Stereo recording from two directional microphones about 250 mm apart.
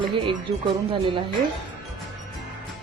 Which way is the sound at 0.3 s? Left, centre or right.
Right.